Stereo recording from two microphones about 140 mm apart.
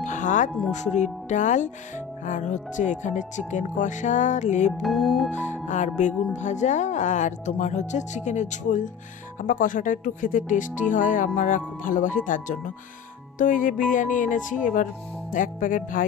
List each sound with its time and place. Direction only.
0.0 s music: 65° left (ahead or behind)
0.7 s speech: 55° left (ahead or behind)
4.7 s music: centre (ahead or behind)
5.3 s speech: 55° left (ahead or behind); by 16.1 s 75° left (ahead or behind)